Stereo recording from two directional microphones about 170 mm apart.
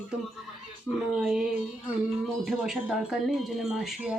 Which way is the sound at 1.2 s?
5° right (ahead or behind).